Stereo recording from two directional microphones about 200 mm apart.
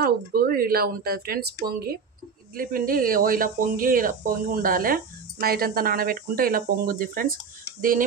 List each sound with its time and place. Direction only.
0.0 s speech: 50° right (ahead or behind)